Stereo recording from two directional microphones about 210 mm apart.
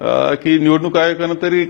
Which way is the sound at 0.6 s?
15° left (ahead or behind).